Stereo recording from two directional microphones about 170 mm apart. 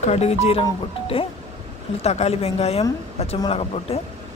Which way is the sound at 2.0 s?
40° left (ahead or behind).